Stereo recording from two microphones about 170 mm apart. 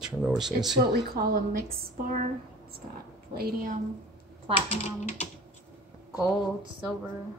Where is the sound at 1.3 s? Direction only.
60° right (ahead or behind).